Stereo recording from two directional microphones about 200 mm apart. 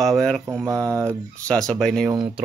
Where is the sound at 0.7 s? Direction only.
15° right (ahead or behind).